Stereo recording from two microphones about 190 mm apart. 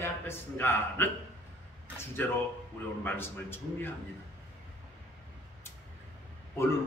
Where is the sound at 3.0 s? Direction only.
10° left (ahead or behind).